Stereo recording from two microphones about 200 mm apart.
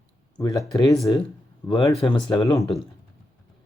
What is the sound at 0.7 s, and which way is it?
Speech, 20° left (ahead or behind).